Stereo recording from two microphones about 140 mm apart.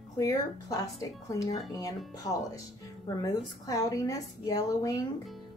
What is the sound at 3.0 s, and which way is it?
A woman's voice, 25° left (ahead or behind).